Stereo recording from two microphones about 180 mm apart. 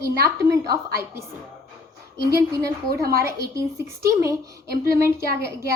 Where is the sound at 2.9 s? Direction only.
55° right (ahead or behind).